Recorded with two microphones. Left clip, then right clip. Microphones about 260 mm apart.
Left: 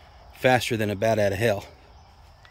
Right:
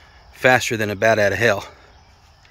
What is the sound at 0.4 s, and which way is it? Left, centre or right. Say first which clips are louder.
Speech: right 5 dB; centre.